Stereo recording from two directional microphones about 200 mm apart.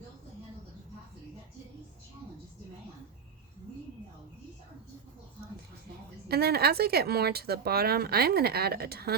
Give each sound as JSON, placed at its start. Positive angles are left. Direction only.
{"t": 6.2, "sound": "speech", "side_deg": -50}